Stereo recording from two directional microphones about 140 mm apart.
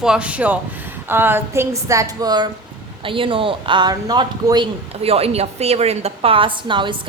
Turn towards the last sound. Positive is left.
turn(degrees=-35)  # may be behind; listen again after turning